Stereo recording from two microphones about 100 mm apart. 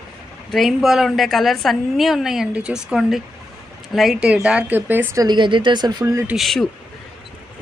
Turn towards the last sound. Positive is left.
turn(degrees=5)  # may be behind; listen again after turning